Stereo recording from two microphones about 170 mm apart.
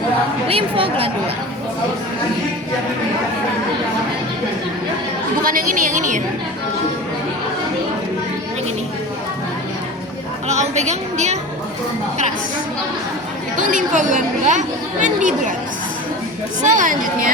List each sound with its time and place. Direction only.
0.4 s a woman's voice: 35° right (ahead or behind)
5.4 s a woman's voice: 55° right (ahead or behind)
10.5 s speech: 40° right (ahead or behind)
13.6 s speech: 50° right (ahead or behind)
16.7 s speech: 50° right (ahead or behind)